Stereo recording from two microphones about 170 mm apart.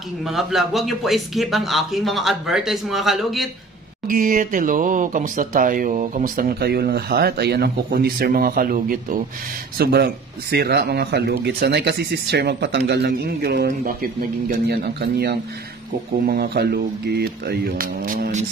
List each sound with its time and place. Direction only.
0.3 s speech: centre (ahead or behind)
4.1 s speech: 50° right (ahead or behind)
9.8 s speech: 70° right (ahead or behind); by 18.4 s 55° right (ahead or behind)